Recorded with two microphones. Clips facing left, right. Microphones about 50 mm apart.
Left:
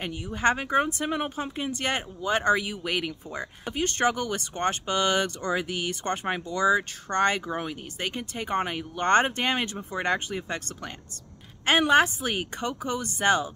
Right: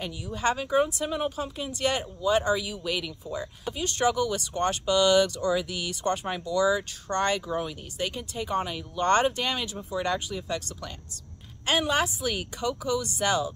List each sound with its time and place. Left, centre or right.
0.0 s speech: left